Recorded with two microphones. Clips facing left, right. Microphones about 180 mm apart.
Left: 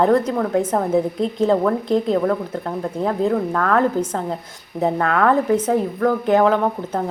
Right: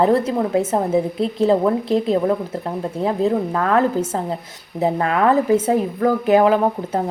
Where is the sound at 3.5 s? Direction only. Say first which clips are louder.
Even; 10° right (ahead or behind).